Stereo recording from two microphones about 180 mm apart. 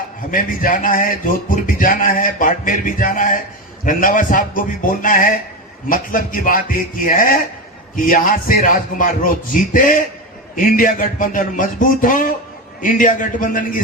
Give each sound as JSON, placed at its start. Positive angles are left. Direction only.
{"t": 0.3, "sound": "speech", "side_deg": 50}